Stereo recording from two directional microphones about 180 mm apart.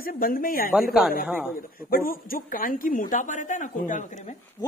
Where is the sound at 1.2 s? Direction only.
10° right (ahead or behind).